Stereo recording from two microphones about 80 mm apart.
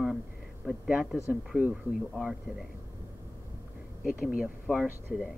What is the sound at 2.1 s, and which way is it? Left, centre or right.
Speech, centre.